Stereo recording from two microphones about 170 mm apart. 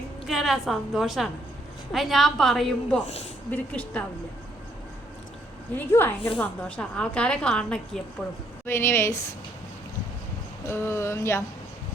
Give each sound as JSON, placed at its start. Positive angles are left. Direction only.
{"t": 0.3, "sound": "a woman's voice", "side_deg": 0}
{"t": 5.7, "sound": "a woman's voice", "side_deg": 15}
{"t": 10.7, "sound": "speech", "side_deg": 15}